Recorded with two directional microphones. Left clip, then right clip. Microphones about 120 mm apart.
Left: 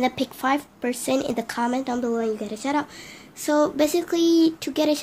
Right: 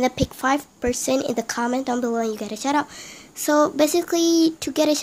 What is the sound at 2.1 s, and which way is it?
A woman's voice, 55° right (ahead or behind).